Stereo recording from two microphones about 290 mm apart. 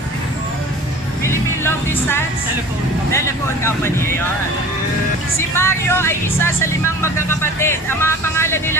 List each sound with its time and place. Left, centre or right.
1.2 s music: centre
3.1 s speech: centre
5.6 s speech: centre